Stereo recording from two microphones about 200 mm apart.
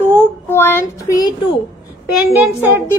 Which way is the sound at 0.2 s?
10° left (ahead or behind).